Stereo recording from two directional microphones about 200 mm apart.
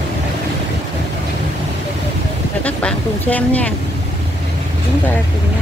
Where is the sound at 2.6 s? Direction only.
5° left (ahead or behind).